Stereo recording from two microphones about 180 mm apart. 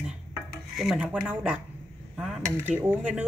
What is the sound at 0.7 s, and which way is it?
Speech, 5° right (ahead or behind).